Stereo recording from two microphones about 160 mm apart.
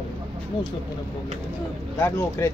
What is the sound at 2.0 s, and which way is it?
Speech, 15° left (ahead or behind).